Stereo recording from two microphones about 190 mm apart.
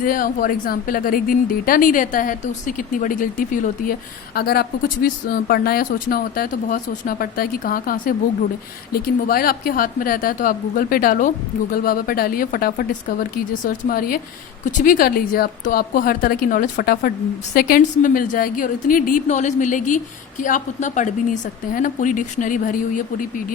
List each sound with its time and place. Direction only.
0.0 s a woman's voice: 50° left (ahead or behind)
4.4 s a woman's voice: 55° left (ahead or behind)